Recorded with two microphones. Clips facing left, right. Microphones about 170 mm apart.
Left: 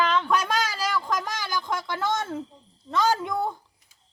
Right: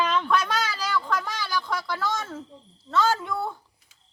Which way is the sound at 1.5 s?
20° left (ahead or behind).